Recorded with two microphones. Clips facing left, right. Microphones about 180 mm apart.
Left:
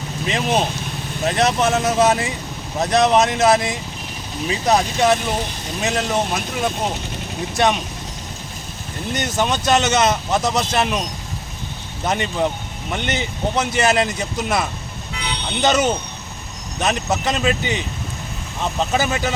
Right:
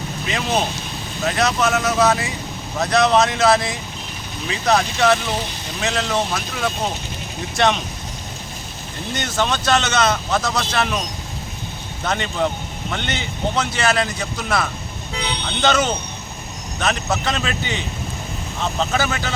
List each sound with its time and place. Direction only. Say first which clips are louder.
0.3 s speech: left 2 dB; 25° left (ahead or behind)
9.1 s speech: left 1 dB; 15° left (ahead or behind)
12.0 s speech: left 1 dB; 15° left (ahead or behind)